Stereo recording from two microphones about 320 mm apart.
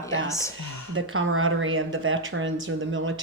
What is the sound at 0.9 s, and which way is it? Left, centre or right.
Speech, right.